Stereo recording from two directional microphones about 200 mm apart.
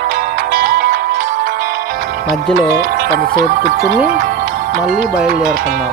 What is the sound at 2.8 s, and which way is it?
Speech, 45° right (ahead or behind).